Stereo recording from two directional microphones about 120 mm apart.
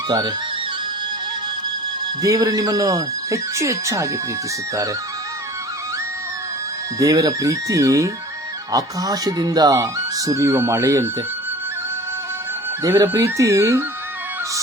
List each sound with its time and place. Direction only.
0.1 s speech: 35° right (ahead or behind)
2.2 s speech: 30° right (ahead or behind)
7.0 s speech: 30° right (ahead or behind)
12.8 s speech: 25° right (ahead or behind)